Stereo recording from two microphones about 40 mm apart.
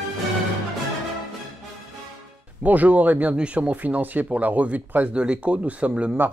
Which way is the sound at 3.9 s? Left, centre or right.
Right.